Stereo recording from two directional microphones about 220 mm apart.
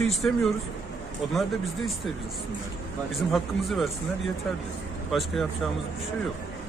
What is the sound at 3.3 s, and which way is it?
Speech, centre (ahead or behind).